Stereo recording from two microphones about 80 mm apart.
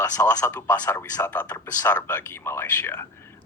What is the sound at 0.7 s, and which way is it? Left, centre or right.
Speech, left.